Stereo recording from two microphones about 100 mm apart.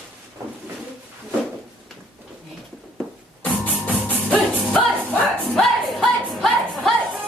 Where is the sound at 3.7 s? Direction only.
15° right (ahead or behind).